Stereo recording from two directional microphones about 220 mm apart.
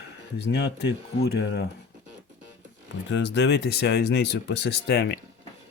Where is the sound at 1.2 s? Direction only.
50° left (ahead or behind).